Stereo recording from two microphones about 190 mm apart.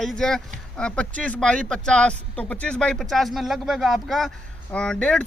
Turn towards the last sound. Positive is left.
turn(degrees=5)  # may be behind; listen again after turning